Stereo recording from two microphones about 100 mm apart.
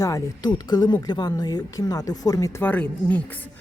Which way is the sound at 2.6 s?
15° left (ahead or behind).